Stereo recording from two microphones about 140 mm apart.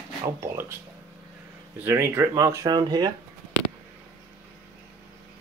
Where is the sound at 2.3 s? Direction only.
25° right (ahead or behind).